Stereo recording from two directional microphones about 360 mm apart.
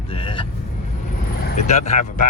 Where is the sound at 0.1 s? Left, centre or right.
Centre.